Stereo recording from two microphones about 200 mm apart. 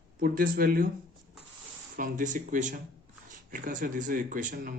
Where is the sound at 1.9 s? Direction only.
40° right (ahead or behind).